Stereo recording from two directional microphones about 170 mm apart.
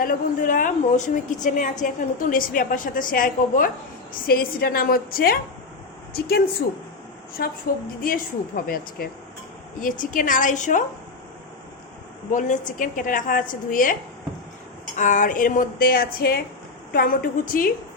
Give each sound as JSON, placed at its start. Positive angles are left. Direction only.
{"t": 0.0, "sound": "a woman's voice", "side_deg": 55}
{"t": 12.3, "sound": "a woman's voice", "side_deg": 50}
{"t": 14.9, "sound": "a woman's voice", "side_deg": 50}